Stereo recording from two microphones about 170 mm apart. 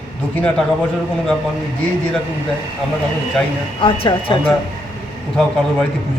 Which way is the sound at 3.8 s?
30° left (ahead or behind).